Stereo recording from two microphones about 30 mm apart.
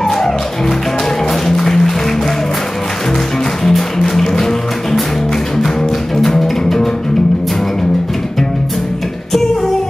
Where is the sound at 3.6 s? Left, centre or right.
Centre.